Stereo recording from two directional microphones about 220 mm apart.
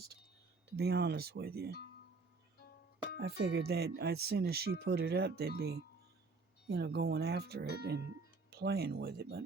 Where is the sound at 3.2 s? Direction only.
45° right (ahead or behind).